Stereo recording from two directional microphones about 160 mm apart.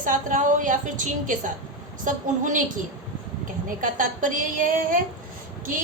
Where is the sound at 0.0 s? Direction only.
55° right (ahead or behind).